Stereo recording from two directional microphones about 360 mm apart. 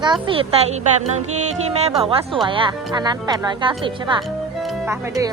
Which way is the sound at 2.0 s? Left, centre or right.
Centre.